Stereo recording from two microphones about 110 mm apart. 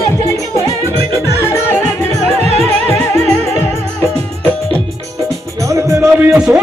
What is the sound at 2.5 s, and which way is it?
Music, 70° right (ahead or behind).